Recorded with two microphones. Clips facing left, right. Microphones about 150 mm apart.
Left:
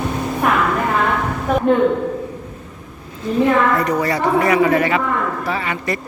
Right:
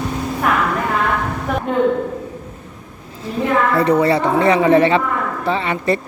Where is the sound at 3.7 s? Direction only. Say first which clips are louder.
Right 4 dB; 30° right (ahead or behind).